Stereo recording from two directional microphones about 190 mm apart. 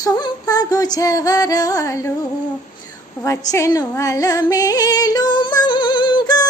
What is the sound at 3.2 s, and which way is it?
Yodeling, 15° left (ahead or behind).